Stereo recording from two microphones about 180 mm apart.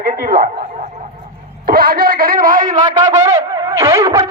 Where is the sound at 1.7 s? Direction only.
55° right (ahead or behind).